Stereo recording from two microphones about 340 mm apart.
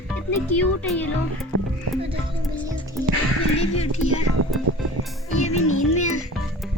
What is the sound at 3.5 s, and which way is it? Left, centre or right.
Speech, centre.